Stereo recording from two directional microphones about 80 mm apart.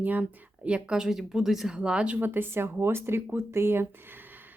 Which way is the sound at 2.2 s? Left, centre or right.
Right.